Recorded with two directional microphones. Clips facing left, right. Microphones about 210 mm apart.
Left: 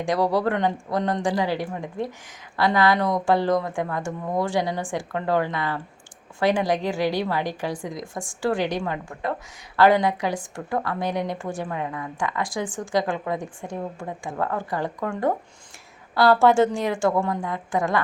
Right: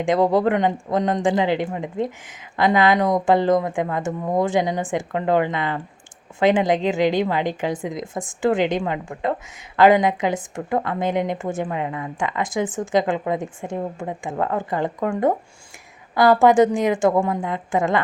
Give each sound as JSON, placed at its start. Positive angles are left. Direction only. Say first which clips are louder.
{"t": 0.0, "sound": "a woman's voice", "louder": "right 4 dB", "side_deg": -20}